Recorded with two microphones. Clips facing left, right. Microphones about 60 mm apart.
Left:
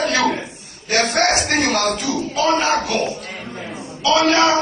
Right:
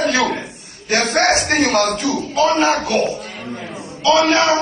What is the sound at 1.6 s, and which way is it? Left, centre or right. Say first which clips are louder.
Speech: right 3 dB; right.